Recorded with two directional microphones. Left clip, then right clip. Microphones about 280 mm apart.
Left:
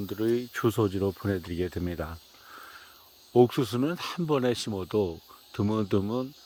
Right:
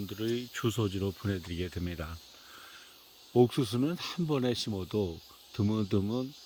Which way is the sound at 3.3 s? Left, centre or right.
Centre.